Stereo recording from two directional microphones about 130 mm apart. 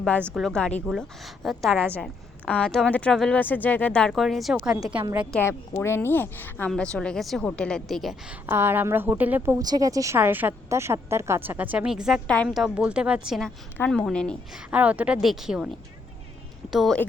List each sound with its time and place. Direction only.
0.3 s speech: 5° left (ahead or behind)
4.1 s a woman's voice: centre (ahead or behind)
5.4 s speech: 20° left (ahead or behind); by 8.1 s centre (ahead or behind)
8.3 s a woman's voice: 15° right (ahead or behind)
9.6 s speech: 30° right (ahead or behind)
10.2 s a woman's voice: 15° right (ahead or behind)
13.7 s speech: 10° left (ahead or behind)
14.5 s a woman's voice: 10° right (ahead or behind)